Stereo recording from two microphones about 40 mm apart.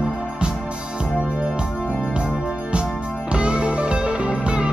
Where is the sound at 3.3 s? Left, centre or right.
Right.